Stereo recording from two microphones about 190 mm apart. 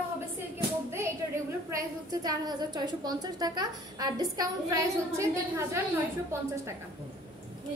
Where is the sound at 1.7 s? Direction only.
20° right (ahead or behind).